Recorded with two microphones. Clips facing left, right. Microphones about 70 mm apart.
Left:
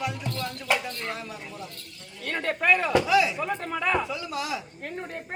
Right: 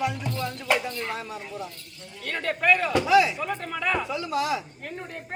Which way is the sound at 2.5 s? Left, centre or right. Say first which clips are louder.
Right 1 dB; centre.